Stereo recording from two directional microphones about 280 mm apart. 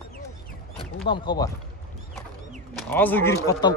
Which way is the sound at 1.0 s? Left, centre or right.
Centre.